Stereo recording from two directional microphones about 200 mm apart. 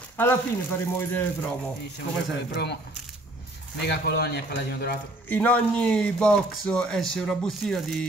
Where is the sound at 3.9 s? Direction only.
55° left (ahead or behind).